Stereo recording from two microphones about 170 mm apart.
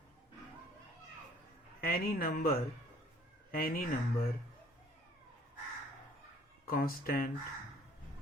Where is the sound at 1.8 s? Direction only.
60° left (ahead or behind).